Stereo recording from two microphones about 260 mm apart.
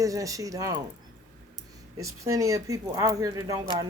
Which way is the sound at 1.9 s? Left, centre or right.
Centre.